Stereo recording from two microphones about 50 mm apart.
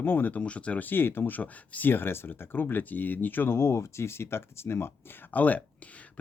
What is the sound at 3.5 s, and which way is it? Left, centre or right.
Speech, left.